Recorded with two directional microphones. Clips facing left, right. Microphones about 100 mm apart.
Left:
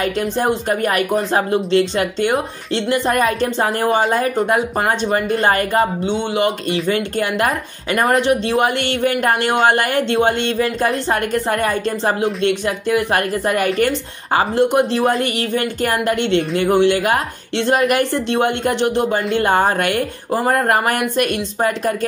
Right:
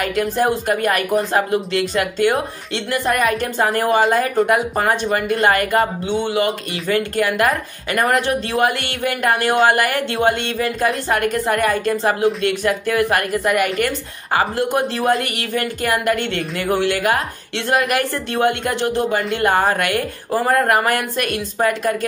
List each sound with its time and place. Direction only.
0.4 s a woman's voice: 25° left (ahead or behind)
13.3 s a woman's voice: 35° left (ahead or behind)